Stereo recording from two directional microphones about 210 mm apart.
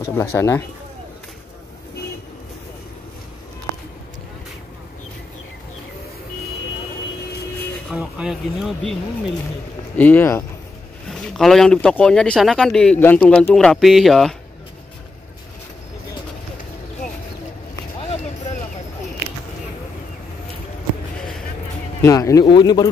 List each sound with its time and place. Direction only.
0.0 s speech: 10° left (ahead or behind)
7.9 s speech: 5° right (ahead or behind)
9.9 s speech: 10° left (ahead or behind)
22.0 s speech: 15° left (ahead or behind)